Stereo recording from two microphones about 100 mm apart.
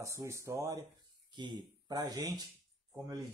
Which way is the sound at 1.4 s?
45° right (ahead or behind).